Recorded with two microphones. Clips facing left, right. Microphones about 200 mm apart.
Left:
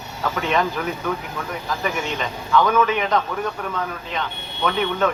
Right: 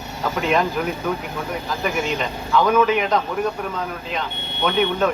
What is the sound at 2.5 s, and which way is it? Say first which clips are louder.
Speech: right 1 dB; 10° right (ahead or behind).